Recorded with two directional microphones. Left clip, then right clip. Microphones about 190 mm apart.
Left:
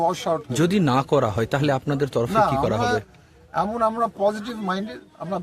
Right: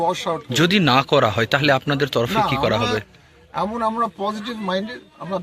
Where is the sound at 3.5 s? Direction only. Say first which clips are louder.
Even; 25° left (ahead or behind).